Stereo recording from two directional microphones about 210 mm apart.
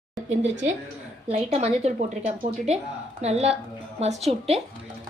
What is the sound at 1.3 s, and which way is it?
A woman's voice, 30° right (ahead or behind).